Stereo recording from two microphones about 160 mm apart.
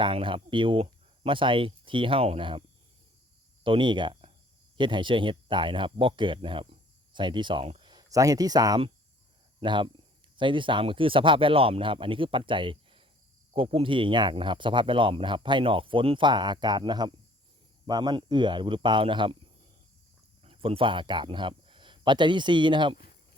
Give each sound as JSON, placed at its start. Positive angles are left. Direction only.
{"t": 0.0, "sound": "speech", "side_deg": -30}
{"t": 20.4, "sound": "speech", "side_deg": -35}